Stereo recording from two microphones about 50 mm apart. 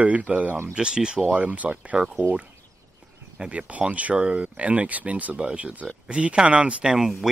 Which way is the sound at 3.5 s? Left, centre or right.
Right.